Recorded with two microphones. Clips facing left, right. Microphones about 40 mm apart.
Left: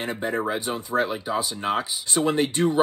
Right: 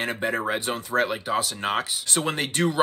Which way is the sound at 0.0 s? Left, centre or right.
Right.